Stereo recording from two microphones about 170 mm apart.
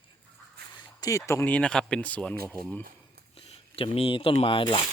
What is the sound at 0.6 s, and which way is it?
Quack, 70° right (ahead or behind).